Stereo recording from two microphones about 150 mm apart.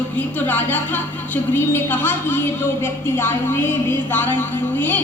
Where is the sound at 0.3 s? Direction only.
10° left (ahead or behind).